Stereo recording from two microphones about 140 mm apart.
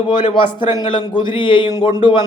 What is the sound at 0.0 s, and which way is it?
Speech, 35° left (ahead or behind).